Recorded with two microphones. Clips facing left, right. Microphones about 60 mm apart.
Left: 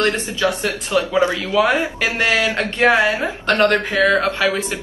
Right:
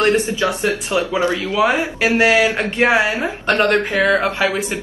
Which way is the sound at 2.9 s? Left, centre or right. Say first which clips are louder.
Even; centre.